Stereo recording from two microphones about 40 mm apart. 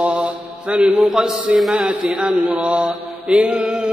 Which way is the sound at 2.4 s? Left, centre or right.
Right.